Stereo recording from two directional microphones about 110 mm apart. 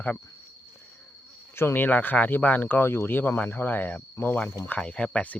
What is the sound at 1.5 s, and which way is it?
Speech, 20° left (ahead or behind).